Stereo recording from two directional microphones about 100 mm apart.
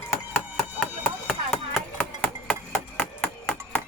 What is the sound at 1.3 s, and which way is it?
Chop, 5° left (ahead or behind).